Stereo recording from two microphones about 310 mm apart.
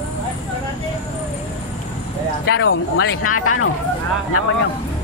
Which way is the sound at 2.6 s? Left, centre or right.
Left.